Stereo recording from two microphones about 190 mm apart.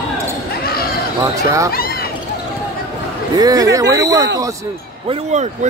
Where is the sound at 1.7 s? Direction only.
50° left (ahead or behind).